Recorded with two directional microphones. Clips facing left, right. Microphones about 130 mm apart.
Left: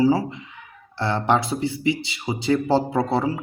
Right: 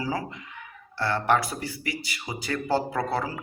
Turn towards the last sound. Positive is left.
turn(degrees=25)  # may be behind; listen again after turning